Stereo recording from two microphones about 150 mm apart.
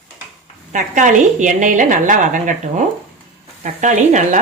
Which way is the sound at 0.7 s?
55° right (ahead or behind).